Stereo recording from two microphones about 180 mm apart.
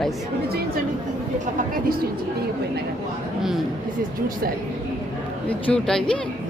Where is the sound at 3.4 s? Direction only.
Centre (ahead or behind).